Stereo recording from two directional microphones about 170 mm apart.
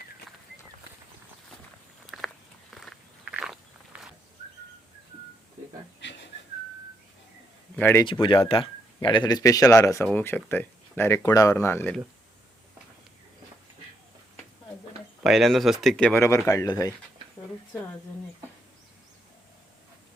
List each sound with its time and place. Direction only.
2.0 s biting: centre (ahead or behind)
6.0 s whistling: 90° left
7.8 s speech: 10° left (ahead or behind)
8.2 s speech: 30° left (ahead or behind); by 11.9 s 15° left (ahead or behind)
15.2 s speech: centre (ahead or behind)
16.2 s speech: 15° left (ahead or behind)